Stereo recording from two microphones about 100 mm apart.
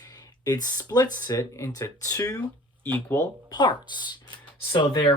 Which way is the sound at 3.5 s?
50° left (ahead or behind).